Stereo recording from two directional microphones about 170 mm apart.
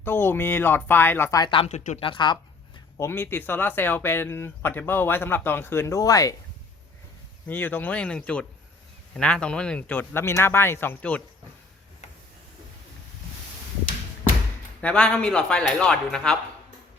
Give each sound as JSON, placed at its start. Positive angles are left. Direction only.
{"t": 0.0, "sound": "speech", "side_deg": 10}
{"t": 2.0, "sound": "speech", "side_deg": 30}
{"t": 3.0, "sound": "speech", "side_deg": 15}
{"t": 7.4, "sound": "speech", "side_deg": 10}
{"t": 14.8, "sound": "speech", "side_deg": 10}